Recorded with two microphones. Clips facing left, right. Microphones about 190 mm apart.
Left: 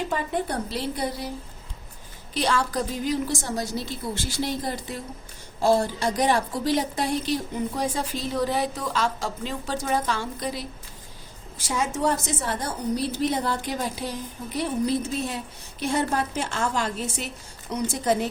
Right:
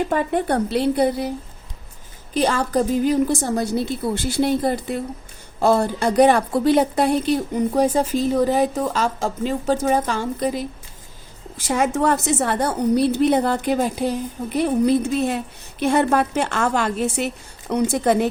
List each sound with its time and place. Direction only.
0.1 s a woman's voice: 60° right (ahead or behind)
2.3 s a woman's voice: 50° right (ahead or behind)
11.7 s a woman's voice: 60° right (ahead or behind)